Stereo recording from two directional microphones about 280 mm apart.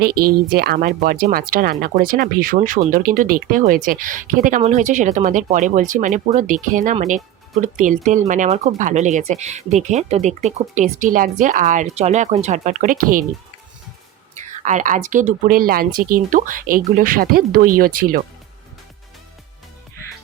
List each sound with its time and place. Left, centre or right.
0.1 s speech: right
0.4 s speech: right
14.6 s speech: right